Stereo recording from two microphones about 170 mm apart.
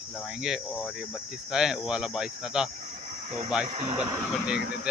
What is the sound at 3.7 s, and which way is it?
Speech, 45° right (ahead or behind).